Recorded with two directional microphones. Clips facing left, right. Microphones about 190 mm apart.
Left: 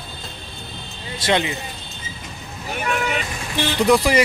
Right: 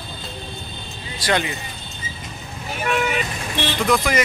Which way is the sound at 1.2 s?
25° left (ahead or behind).